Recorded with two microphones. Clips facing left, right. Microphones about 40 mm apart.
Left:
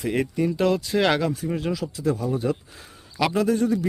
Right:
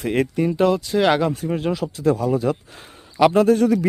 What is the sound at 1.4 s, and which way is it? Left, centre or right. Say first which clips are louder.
Speech: right 3 dB; centre.